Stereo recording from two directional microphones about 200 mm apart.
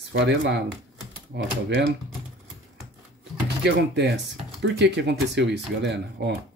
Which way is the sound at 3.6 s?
60° right (ahead or behind).